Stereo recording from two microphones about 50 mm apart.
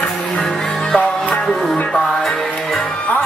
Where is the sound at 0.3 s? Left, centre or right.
Centre.